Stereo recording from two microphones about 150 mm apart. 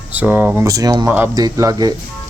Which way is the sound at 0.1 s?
10° right (ahead or behind).